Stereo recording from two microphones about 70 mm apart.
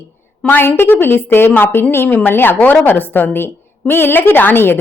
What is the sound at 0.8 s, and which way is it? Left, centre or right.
A woman's voice, left.